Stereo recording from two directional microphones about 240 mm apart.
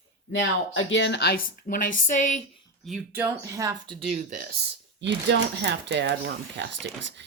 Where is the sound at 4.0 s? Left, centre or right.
Right.